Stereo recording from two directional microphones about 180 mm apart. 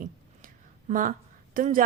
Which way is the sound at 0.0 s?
45° right (ahead or behind).